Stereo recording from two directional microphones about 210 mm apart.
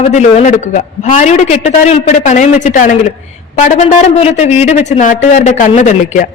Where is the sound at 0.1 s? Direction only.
35° left (ahead or behind).